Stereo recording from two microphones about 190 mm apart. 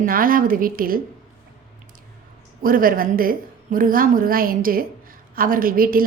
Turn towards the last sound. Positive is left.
turn(degrees=-50)  # may be behind; listen again after turning